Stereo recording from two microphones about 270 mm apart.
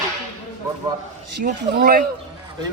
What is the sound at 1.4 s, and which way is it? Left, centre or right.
Speech, right.